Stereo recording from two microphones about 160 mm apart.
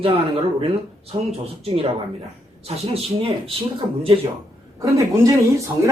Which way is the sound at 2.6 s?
35° right (ahead or behind).